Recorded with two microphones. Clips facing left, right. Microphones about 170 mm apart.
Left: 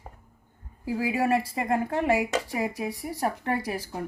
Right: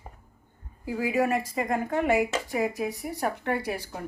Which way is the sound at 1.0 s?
30° left (ahead or behind).